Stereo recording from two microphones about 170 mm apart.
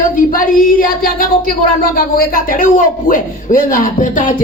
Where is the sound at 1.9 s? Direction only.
55° left (ahead or behind).